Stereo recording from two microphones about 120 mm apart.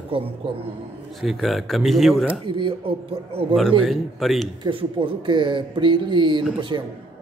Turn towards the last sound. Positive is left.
turn(degrees=-35)  # may be behind; listen again after turning